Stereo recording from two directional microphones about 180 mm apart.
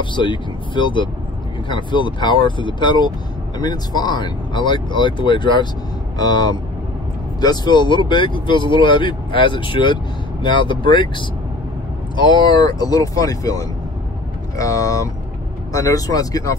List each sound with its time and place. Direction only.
0.0 s speech: 25° left (ahead or behind)